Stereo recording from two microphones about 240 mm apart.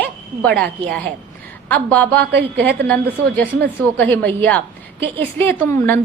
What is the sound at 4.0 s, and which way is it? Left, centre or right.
A woman's voice, centre.